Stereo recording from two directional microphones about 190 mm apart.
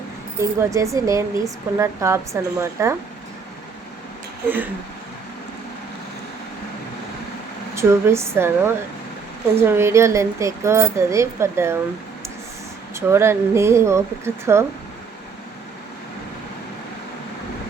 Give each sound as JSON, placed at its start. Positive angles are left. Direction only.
{"t": 0.3, "sound": "speech", "side_deg": -15}
{"t": 7.8, "sound": "speech", "side_deg": -15}
{"t": 12.9, "sound": "speech", "side_deg": -15}